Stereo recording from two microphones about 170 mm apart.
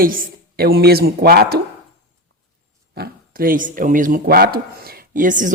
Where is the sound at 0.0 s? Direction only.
55° right (ahead or behind).